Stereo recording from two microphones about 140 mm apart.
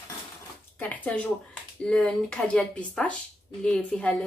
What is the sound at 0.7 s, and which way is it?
Speech, 10° left (ahead or behind).